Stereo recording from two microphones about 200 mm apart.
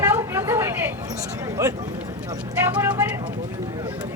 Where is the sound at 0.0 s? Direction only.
10° right (ahead or behind).